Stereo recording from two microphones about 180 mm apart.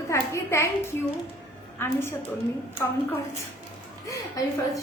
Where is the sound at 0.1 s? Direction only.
15° left (ahead or behind).